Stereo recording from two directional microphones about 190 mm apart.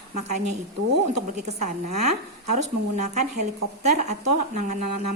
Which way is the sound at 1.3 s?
40° right (ahead or behind).